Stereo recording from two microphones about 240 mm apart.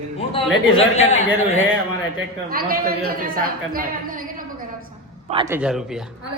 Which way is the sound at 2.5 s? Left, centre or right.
Right.